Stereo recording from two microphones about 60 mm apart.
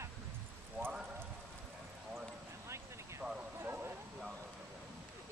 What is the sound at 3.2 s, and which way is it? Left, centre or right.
Clip-clop, right.